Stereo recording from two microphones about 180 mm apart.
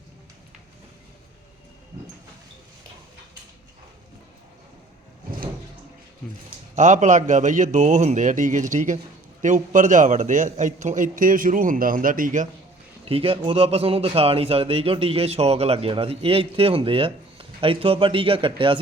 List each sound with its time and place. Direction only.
6.7 s a man's voice: 45° right (ahead or behind)
13.1 s speech: 30° right (ahead or behind)